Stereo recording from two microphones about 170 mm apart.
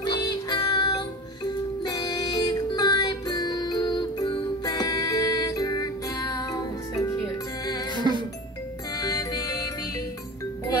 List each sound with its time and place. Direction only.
0.0 s music: 20° left (ahead or behind)
7.9 s music: 25° right (ahead or behind)
8.9 s music: 20° left (ahead or behind)